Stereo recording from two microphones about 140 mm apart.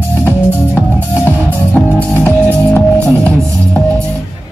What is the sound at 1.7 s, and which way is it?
Music, 15° left (ahead or behind).